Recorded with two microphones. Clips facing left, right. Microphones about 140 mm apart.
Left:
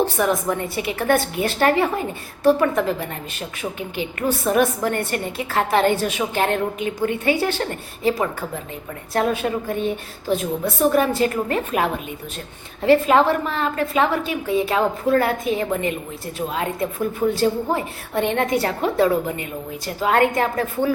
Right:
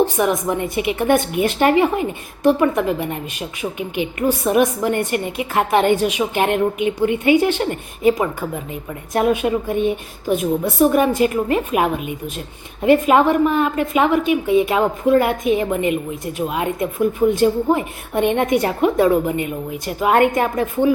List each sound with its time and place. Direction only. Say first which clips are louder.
0.0 s a woman's voice: right 3 dB; 15° right (ahead or behind)